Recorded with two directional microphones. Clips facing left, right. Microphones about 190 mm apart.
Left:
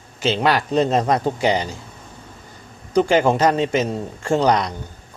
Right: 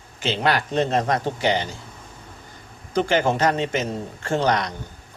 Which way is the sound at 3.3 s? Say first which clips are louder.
Left 4 dB; 35° left (ahead or behind).